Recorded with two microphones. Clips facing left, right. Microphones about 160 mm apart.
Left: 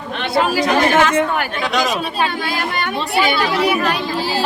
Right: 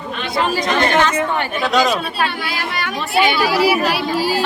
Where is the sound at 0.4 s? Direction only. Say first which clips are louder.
Even; 5° left (ahead or behind).